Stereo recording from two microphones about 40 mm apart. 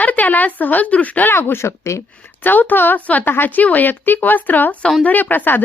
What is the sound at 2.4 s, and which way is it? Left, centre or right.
A woman's voice, left.